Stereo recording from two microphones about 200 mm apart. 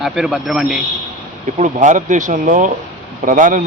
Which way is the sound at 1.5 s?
35° right (ahead or behind).